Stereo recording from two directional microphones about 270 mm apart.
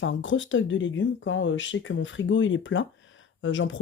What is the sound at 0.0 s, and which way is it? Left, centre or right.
Speech, left.